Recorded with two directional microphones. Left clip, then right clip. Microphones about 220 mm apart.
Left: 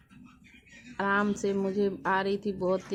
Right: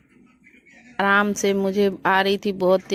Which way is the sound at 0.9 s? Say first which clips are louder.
Right 9 dB; 40° right (ahead or behind).